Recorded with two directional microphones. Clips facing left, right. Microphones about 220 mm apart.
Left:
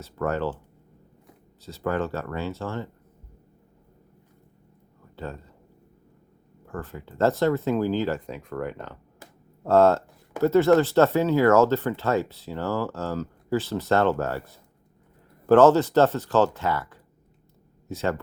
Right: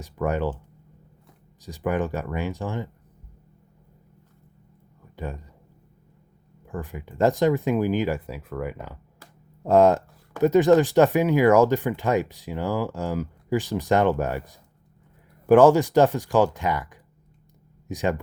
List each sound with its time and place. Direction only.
0.0 s speech: 15° right (ahead or behind)
1.6 s speech: 15° right (ahead or behind)
5.1 s speech: 15° right (ahead or behind)
6.7 s speech: 15° right (ahead or behind)